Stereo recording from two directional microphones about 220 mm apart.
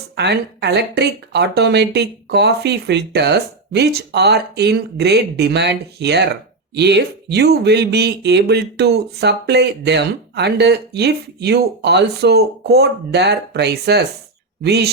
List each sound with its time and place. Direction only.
0.2 s speech: 50° right (ahead or behind)